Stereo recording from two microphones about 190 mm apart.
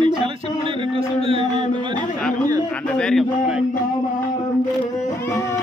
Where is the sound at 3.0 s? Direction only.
Centre (ahead or behind).